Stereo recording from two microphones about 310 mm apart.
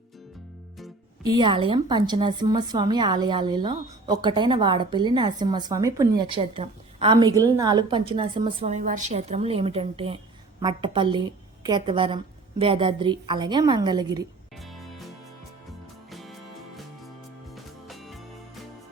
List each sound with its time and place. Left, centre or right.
1.2 s a woman's voice: centre
14.6 s music: centre